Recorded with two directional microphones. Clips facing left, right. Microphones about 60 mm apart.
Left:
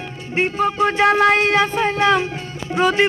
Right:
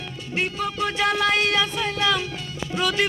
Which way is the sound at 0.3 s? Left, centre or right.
Left.